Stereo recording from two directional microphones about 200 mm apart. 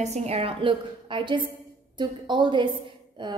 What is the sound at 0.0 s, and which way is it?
A woman's voice, 35° right (ahead or behind).